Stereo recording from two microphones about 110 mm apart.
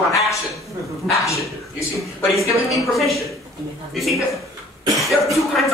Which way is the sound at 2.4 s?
Centre (ahead or behind).